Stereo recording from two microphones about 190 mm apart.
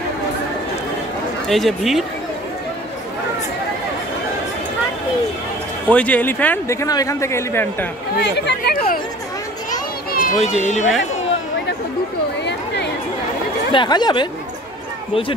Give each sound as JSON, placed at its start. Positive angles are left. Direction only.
{"t": 1.5, "sound": "speech", "side_deg": 0}
{"t": 5.9, "sound": "a man's voice", "side_deg": 5}
{"t": 8.5, "sound": "speech", "side_deg": 55}
{"t": 9.7, "sound": "children playing", "side_deg": 45}
{"t": 10.4, "sound": "speech", "side_deg": 40}
{"t": 12.4, "sound": "chatter", "side_deg": 65}
{"t": 13.7, "sound": "speech", "side_deg": 25}